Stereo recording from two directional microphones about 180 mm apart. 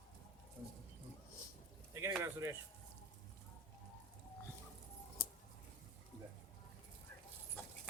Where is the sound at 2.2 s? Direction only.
15° right (ahead or behind).